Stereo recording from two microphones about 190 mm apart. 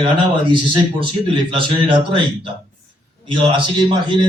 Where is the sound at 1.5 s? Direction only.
25° right (ahead or behind).